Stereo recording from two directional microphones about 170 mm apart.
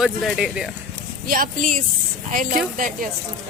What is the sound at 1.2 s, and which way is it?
Speech, 55° right (ahead or behind).